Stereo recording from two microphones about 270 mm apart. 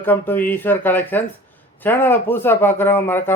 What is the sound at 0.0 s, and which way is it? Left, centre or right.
Speech, centre.